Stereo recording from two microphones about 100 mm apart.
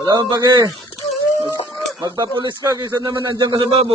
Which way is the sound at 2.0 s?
45° right (ahead or behind).